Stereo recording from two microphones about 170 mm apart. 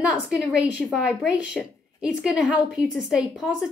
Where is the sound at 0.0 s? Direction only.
5° right (ahead or behind).